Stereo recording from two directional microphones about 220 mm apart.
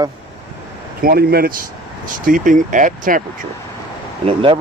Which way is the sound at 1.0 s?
45° right (ahead or behind).